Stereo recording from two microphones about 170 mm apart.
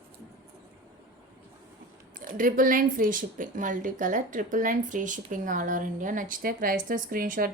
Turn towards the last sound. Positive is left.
turn(degrees=-55)  # may be behind; listen again after turning